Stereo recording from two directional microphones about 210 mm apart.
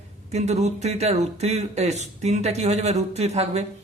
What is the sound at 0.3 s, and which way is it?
Speech, 30° right (ahead or behind).